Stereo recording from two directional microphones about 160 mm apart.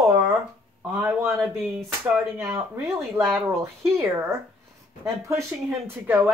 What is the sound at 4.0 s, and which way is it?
A woman's voice, 15° right (ahead or behind).